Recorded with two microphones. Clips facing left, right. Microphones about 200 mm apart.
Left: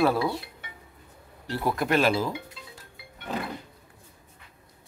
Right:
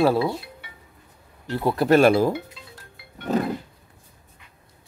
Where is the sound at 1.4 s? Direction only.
20° right (ahead or behind).